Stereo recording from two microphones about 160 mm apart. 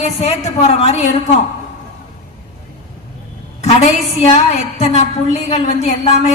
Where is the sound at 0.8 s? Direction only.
40° left (ahead or behind).